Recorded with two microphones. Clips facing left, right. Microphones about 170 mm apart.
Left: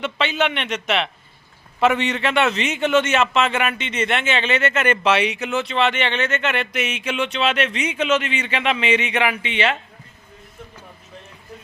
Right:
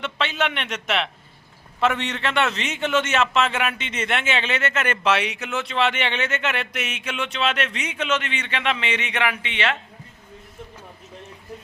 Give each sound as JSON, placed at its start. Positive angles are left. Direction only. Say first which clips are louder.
{"t": 0.0, "sound": "a man's voice", "louder": "left 3 dB", "side_deg": 0}